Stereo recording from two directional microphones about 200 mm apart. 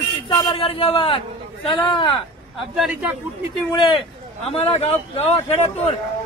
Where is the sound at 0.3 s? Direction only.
25° left (ahead or behind).